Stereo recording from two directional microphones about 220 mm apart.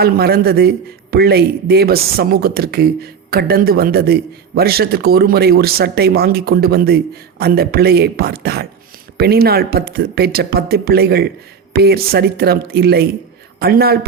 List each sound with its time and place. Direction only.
0.0 s speech: 45° right (ahead or behind)